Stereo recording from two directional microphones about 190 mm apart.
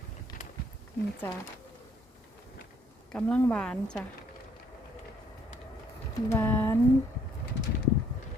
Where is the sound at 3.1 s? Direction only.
5° left (ahead or behind).